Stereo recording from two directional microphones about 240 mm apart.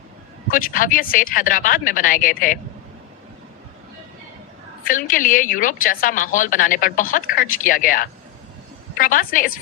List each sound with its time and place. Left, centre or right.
0.5 s a woman's voice: left
4.9 s a woman's voice: left